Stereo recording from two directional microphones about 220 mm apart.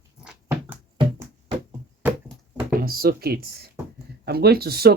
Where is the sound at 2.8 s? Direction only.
45° right (ahead or behind).